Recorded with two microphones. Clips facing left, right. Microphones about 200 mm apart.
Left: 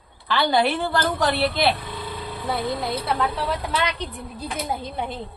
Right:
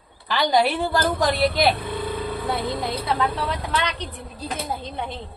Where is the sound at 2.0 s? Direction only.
50° right (ahead or behind).